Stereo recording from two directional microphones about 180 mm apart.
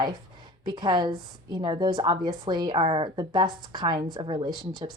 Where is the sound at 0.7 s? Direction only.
25° right (ahead or behind).